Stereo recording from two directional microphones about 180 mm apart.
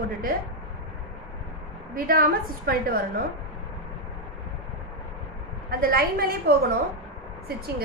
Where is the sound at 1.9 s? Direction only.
55° right (ahead or behind).